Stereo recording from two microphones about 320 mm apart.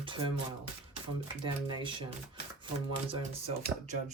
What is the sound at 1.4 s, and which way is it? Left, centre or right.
Speech, centre.